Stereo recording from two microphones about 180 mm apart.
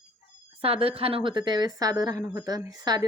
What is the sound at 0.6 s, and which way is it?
Speech, 30° right (ahead or behind).